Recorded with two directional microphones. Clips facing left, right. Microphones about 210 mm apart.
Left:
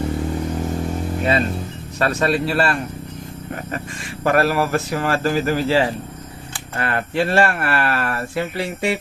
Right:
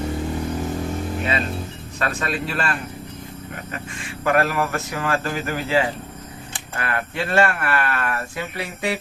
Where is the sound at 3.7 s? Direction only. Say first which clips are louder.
Left 4 dB; 35° left (ahead or behind).